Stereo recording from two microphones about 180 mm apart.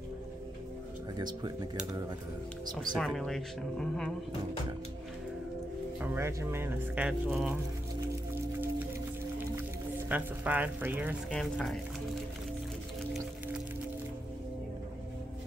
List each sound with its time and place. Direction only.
1.1 s speech: 25° right (ahead or behind)
2.8 s speech: centre (ahead or behind)
5.9 s speech: 15° right (ahead or behind)
10.0 s speech: 10° right (ahead or behind)
11.2 s speech: centre (ahead or behind)